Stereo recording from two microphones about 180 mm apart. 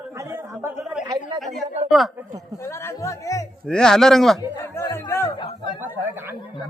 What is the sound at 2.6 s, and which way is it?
Music, 15° left (ahead or behind).